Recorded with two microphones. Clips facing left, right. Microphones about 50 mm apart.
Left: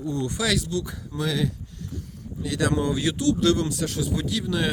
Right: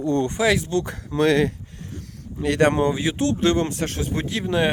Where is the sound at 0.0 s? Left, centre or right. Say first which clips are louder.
Right 7 dB; right.